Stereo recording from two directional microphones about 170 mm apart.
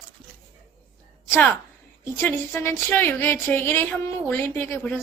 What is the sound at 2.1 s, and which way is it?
A woman's voice, 15° left (ahead or behind).